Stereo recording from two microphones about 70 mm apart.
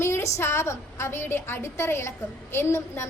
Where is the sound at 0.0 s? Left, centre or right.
Left.